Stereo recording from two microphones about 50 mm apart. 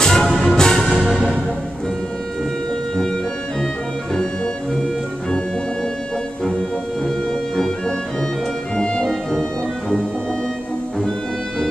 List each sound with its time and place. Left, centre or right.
0.0 s music: centre
8.7 s music: centre
9.0 s music: centre